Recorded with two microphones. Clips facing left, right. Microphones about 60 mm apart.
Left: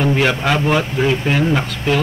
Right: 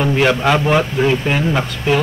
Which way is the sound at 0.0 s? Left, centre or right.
Centre.